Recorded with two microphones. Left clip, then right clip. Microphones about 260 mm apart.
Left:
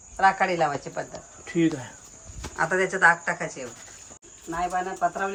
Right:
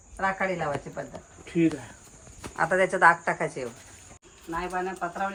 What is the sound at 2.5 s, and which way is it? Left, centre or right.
Speech, centre.